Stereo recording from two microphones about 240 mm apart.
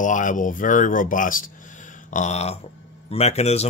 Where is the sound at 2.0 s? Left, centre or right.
Left.